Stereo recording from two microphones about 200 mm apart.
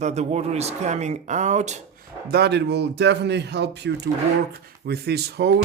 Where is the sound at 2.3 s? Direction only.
55° right (ahead or behind).